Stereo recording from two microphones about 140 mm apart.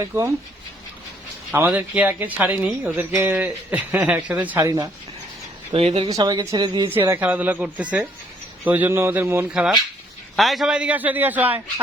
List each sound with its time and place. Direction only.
0.0 s speech: 25° right (ahead or behind)
1.5 s speech: 15° right (ahead or behind)
4.6 s speech: 25° right (ahead or behind)
5.7 s speech: 45° right (ahead or behind)
6.1 s speech: 25° right (ahead or behind)
6.9 s speech: 15° right (ahead or behind)
9.5 s speech: 5° right (ahead or behind)